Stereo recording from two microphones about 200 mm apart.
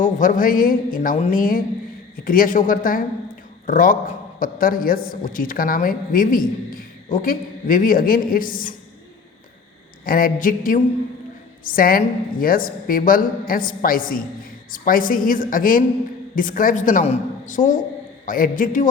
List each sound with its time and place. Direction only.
0.0 s a woman's voice: 40° left (ahead or behind)
10.0 s a woman's voice: 45° left (ahead or behind)